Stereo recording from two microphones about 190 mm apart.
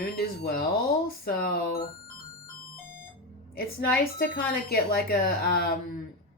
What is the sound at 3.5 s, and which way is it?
Speech, 50° left (ahead or behind).